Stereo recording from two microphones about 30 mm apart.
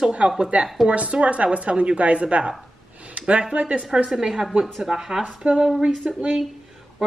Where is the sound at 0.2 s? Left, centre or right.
Right.